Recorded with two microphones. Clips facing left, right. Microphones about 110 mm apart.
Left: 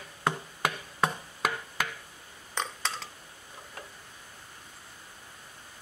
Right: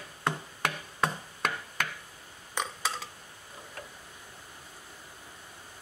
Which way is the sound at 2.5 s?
10° right (ahead or behind).